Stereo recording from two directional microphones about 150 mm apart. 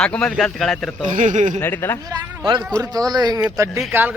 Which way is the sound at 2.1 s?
25° right (ahead or behind).